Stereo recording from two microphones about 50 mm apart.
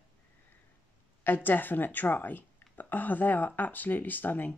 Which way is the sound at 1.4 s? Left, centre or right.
Left.